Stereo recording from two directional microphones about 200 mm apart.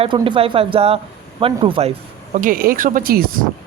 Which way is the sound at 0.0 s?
25° right (ahead or behind).